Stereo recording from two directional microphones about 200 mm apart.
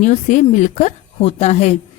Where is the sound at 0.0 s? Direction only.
35° left (ahead or behind).